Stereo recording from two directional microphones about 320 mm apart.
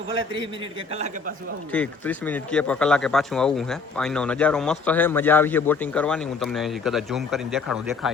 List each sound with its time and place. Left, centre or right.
0.6 s a man's voice: centre
1.7 s a man's voice: centre